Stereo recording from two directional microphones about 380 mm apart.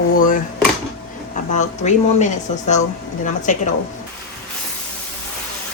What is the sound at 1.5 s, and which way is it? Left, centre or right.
Speech, centre.